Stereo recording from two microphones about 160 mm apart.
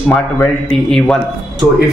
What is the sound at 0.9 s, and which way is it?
Speech, 5° left (ahead or behind).